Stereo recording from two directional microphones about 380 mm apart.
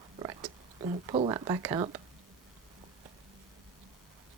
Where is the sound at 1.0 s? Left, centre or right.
Centre.